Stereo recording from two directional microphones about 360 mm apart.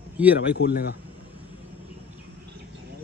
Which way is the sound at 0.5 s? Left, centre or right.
Left.